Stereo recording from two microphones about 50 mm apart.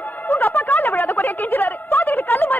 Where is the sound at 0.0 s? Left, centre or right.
Left.